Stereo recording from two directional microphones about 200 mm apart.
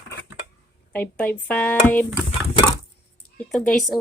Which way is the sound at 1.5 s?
5° left (ahead or behind).